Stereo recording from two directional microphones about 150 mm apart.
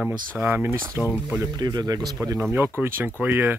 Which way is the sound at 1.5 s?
25° right (ahead or behind).